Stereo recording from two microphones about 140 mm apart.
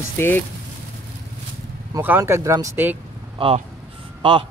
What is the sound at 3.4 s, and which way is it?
Speech, 35° right (ahead or behind).